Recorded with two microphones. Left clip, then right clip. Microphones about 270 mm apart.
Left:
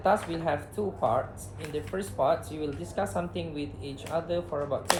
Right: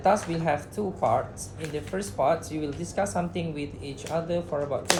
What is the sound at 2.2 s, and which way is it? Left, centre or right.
Speech, right.